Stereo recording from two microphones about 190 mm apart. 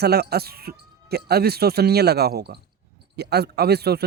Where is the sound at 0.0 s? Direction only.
55° right (ahead or behind).